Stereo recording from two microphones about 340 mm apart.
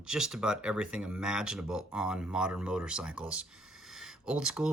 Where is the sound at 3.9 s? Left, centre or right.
Centre.